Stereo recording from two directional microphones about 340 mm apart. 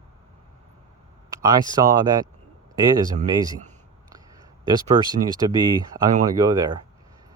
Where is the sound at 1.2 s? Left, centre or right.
Centre.